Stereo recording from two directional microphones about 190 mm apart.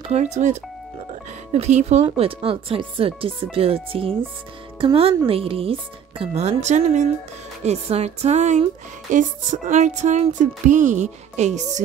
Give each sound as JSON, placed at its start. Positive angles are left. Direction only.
{"t": 0.1, "sound": "speech", "side_deg": -35}